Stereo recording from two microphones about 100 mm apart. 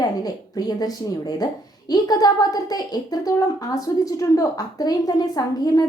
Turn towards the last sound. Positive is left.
turn(degrees=40)  # may be behind; listen again after turning